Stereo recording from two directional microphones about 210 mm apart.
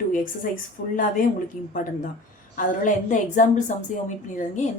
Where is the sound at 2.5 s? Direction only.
40° left (ahead or behind).